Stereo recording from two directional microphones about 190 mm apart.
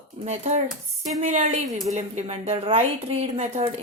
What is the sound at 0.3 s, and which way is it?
A woman's voice, 35° right (ahead or behind).